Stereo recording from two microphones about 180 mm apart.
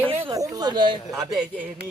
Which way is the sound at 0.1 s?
25° right (ahead or behind).